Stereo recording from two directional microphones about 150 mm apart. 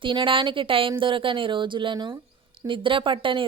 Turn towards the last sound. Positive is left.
turn(degrees=-35)  # may be behind; listen again after turning